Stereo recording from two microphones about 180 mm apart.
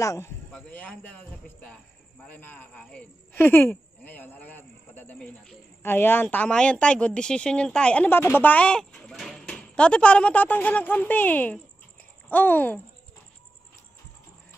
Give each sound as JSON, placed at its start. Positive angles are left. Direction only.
{"t": 0.0, "sound": "speech", "side_deg": 15}
{"t": 0.5, "sound": "speech", "side_deg": 5}